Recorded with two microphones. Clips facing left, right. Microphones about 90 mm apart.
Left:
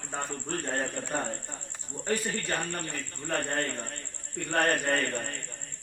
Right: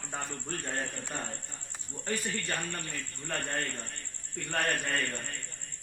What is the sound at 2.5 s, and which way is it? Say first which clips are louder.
A man's voice: left 4 dB; 35° left (ahead or behind).